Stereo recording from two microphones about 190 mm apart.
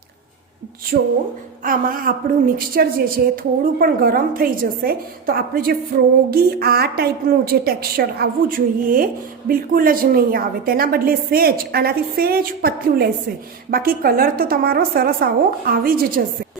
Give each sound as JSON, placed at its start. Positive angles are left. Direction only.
{"t": 0.9, "sound": "a woman's voice", "side_deg": -50}